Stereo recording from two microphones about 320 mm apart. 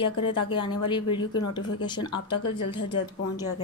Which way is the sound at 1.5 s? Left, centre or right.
Centre.